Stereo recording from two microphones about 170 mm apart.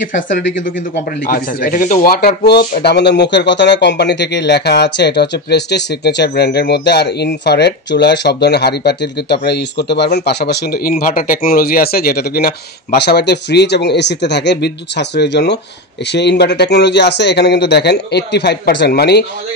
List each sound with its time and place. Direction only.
0.9 s speech: 55° left (ahead or behind); by 19.2 s 75° left (ahead or behind)